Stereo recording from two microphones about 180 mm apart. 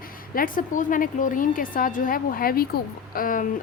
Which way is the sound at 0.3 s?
50° left (ahead or behind).